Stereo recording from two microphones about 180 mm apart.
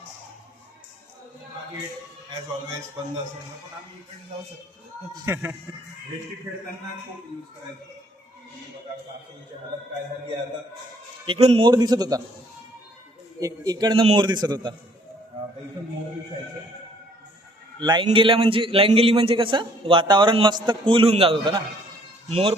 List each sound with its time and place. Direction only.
5.1 s speech: 15° right (ahead or behind)
11.3 s a man's voice: 35° right (ahead or behind)
13.4 s a man's voice: 20° right (ahead or behind)
17.7 s a man's voice: 25° right (ahead or behind)